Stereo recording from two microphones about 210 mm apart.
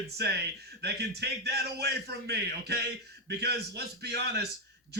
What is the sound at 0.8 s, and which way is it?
A man's voice, 50° right (ahead or behind).